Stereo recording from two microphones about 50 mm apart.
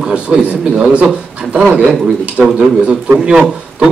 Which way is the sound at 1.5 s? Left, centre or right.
Right.